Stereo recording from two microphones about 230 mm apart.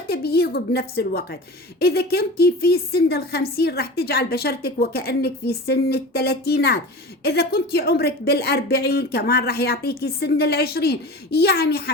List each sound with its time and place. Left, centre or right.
0.1 s a woman's voice: left